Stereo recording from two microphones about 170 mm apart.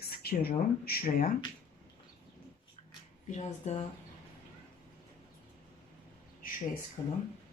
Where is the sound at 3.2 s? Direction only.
45° left (ahead or behind).